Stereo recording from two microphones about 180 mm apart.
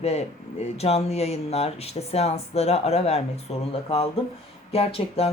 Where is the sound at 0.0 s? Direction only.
35° left (ahead or behind).